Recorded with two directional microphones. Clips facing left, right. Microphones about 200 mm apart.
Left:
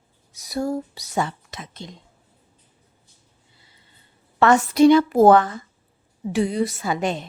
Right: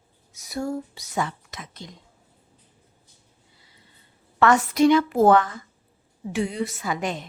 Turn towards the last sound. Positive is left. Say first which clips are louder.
# left 4 dB
turn(degrees=30)  # may be behind; listen again after turning